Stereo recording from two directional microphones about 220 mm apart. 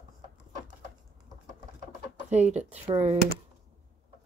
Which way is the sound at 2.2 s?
30° right (ahead or behind).